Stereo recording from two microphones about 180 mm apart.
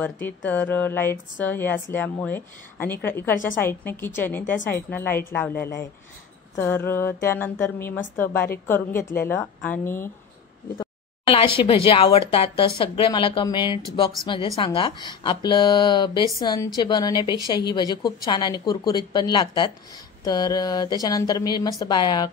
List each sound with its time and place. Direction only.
0.0 s a woman's voice: 10° left (ahead or behind)
6.5 s a woman's voice: 10° left (ahead or behind)
11.2 s a woman's voice: 30° left (ahead or behind)